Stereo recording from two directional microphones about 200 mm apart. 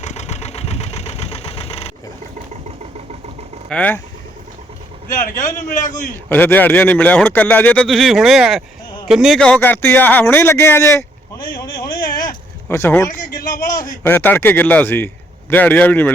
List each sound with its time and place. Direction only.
0.0 s engine: 35° left (ahead or behind)
3.7 s speech: 5° left (ahead or behind)
5.0 s a man's voice: 40° left (ahead or behind)
6.2 s speech: 10° left (ahead or behind)
11.9 s a sound: 45° left (ahead or behind)
12.6 s speech: 10° left (ahead or behind)
13.1 s a man's voice: 40° left (ahead or behind)
14.0 s speech: 10° left (ahead or behind)